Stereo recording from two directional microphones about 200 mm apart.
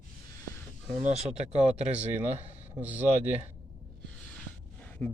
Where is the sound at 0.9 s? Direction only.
35° right (ahead or behind).